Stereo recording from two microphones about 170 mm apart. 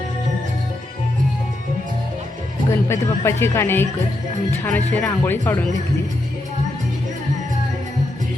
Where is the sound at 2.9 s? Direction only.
15° left (ahead or behind).